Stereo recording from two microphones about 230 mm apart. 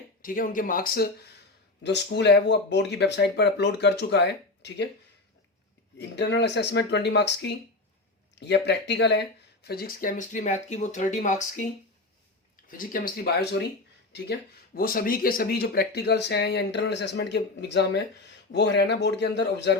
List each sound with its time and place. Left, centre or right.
0.2 s speech: left
1.8 s speech: left
6.0 s speech: left
12.6 s speech: left
14.8 s speech: left